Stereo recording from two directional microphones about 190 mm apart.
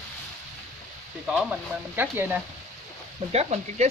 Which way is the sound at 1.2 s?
5° right (ahead or behind).